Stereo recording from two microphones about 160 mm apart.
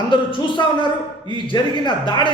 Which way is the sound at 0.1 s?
30° left (ahead or behind).